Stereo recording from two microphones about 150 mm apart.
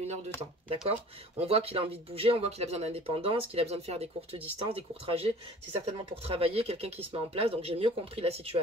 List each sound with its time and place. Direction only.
1.4 s speech: 40° right (ahead or behind)